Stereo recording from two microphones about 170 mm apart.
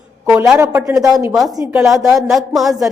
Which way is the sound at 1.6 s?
5° right (ahead or behind).